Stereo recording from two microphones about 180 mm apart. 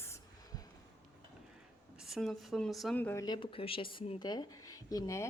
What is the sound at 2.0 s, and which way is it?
Speech, centre (ahead or behind).